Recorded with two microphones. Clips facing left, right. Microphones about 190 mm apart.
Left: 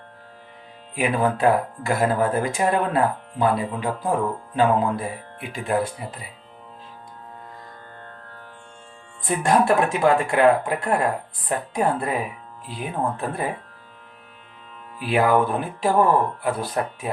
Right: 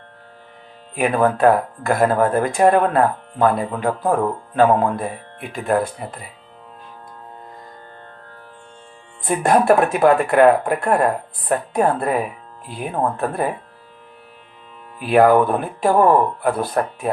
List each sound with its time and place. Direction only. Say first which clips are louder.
0.9 s speech: right 4 dB; 55° right (ahead or behind)
9.2 s speech: right 4 dB; 55° right (ahead or behind)
14.9 s speech: right 6 dB; 50° right (ahead or behind)